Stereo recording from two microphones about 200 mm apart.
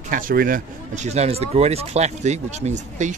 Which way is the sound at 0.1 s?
45° right (ahead or behind).